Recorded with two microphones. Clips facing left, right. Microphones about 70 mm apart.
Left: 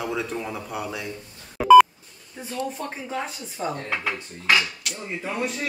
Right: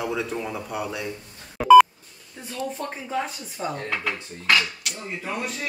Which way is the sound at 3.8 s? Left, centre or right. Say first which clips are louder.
Even; centre.